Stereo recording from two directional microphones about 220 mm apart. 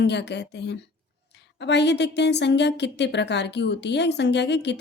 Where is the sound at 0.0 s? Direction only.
50° left (ahead or behind).